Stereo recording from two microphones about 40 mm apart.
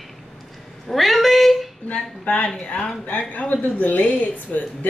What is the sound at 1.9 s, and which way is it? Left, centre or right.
A woman's voice, left.